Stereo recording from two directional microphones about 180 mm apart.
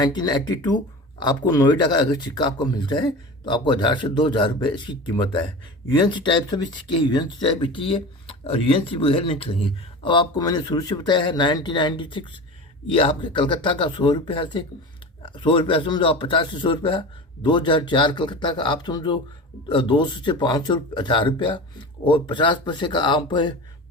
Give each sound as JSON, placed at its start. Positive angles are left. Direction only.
{"t": 0.0, "sound": "speech", "side_deg": 20}